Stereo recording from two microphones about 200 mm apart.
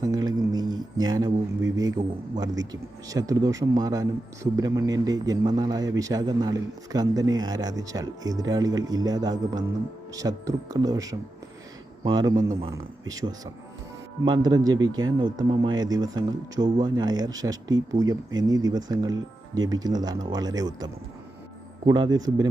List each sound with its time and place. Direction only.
0.0 s music: 20° right (ahead or behind)
1.7 s speech: 20° right (ahead or behind)
21.8 s speech: 20° right (ahead or behind)